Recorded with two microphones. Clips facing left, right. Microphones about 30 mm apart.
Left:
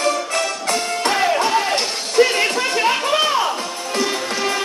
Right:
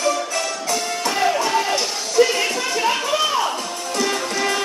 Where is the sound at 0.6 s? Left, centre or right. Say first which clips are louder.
Left 3 dB; left.